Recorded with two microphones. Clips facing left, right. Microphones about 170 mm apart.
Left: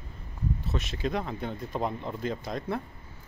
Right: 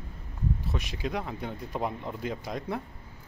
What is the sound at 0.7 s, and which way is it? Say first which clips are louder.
Speech: left 2 dB; 15° right (ahead or behind).